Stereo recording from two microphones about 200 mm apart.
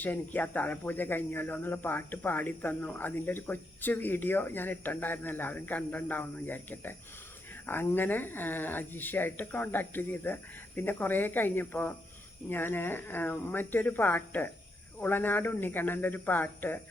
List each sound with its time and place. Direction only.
0.0 s speech: 10° left (ahead or behind)